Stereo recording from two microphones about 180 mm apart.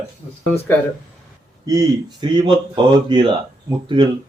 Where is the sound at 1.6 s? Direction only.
20° right (ahead or behind).